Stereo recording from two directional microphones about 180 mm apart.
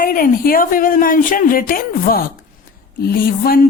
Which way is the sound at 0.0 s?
50° left (ahead or behind).